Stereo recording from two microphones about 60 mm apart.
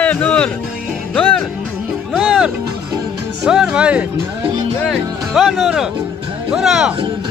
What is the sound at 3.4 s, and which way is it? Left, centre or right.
Music, centre.